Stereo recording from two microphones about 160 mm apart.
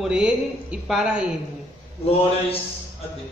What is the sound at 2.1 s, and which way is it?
Speech, 35° left (ahead or behind).